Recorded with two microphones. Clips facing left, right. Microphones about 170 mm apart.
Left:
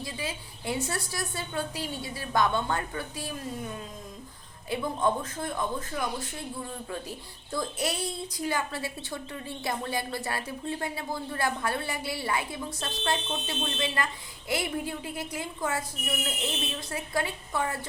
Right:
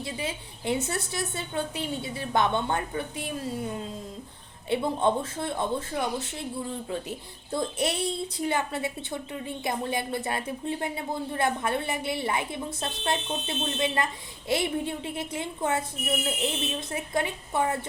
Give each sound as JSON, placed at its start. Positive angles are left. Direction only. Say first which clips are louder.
{"t": 0.0, "sound": "a woman's voice", "louder": "right 3 dB", "side_deg": -25}
{"t": 7.5, "sound": "a woman's voice", "louder": "right 3 dB", "side_deg": -25}